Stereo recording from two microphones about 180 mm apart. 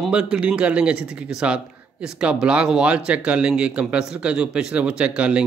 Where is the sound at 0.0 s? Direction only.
5° right (ahead or behind).